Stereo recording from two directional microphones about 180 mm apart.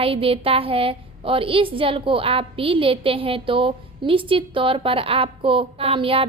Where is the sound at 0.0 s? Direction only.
30° right (ahead or behind).